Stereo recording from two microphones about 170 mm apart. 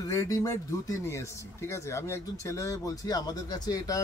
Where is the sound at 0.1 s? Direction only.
20° left (ahead or behind).